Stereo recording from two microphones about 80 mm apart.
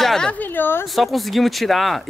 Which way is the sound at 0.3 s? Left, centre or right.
Left.